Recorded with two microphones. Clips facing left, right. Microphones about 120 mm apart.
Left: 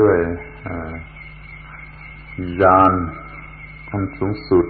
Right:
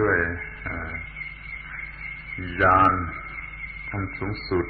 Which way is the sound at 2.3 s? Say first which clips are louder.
Left 7 dB; 35° left (ahead or behind).